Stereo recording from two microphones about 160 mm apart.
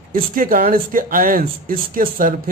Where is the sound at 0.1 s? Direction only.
60° right (ahead or behind).